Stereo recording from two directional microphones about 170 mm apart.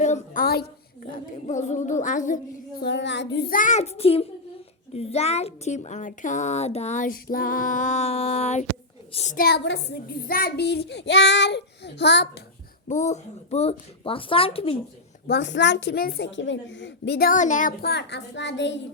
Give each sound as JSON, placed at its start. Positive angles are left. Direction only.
{"t": 0.0, "sound": "a sound", "side_deg": 45}
{"t": 0.4, "sound": "a sound", "side_deg": 65}
{"t": 1.5, "sound": "music", "side_deg": 45}
{"t": 2.8, "sound": "child singing", "side_deg": 90}
{"t": 3.5, "sound": "a child's voice", "side_deg": 50}
{"t": 9.1, "sound": "music", "side_deg": 45}
{"t": 9.4, "sound": "child singing", "side_deg": 75}
{"t": 12.9, "sound": "a child's voice", "side_deg": 45}
{"t": 15.3, "sound": "child singing", "side_deg": 90}
{"t": 17.8, "sound": "child singing", "side_deg": 85}